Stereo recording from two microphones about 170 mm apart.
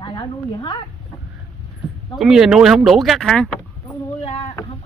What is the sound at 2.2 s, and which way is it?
Speech, 5° right (ahead or behind).